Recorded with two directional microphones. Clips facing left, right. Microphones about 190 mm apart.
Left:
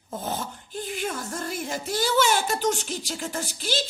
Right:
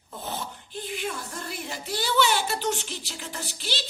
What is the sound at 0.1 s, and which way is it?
Speech, 45° left (ahead or behind).